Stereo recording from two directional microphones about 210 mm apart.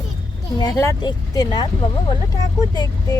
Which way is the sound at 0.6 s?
15° left (ahead or behind).